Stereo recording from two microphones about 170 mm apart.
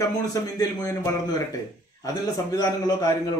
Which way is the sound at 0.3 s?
20° left (ahead or behind).